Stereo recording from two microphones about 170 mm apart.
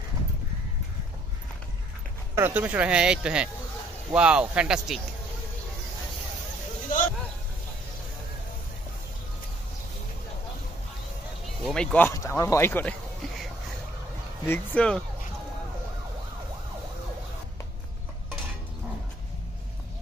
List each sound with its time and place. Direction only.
2.3 s speech: 10° right (ahead or behind)
6.9 s a sound: 50° left (ahead or behind)
11.4 s speech: 5° left (ahead or behind)
12.2 s speech: 20° left (ahead or behind)
14.4 s speech: 10° left (ahead or behind)